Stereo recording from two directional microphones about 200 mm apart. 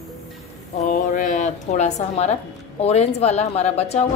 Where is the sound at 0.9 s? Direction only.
40° left (ahead or behind).